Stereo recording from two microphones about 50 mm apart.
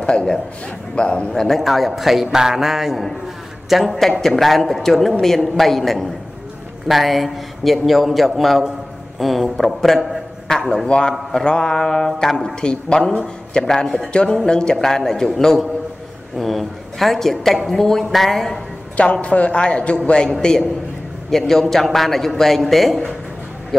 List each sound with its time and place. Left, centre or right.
0.9 s a man's voice: centre
13.8 s a man's voice: centre
14.1 s a man's voice: centre
19.2 s a man's voice: left
20.2 s a man's voice: centre